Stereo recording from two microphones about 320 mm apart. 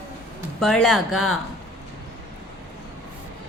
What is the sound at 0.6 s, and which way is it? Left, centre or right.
Speech, centre.